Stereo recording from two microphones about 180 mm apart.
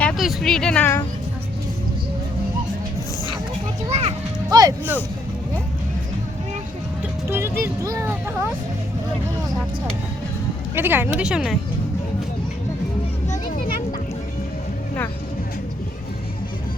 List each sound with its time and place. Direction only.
0.0 s a sound: centre (ahead or behind)
3.8 s children playing: 35° right (ahead or behind)
4.4 s music: 20° right (ahead or behind)
7.3 s music: 15° right (ahead or behind)
10.8 s speech: 10° right (ahead or behind)
13.3 s children playing: 55° left (ahead or behind)